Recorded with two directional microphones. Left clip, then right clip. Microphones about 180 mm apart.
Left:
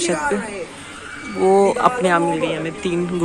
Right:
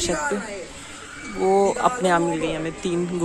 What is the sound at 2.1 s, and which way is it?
Speech, 30° right (ahead or behind).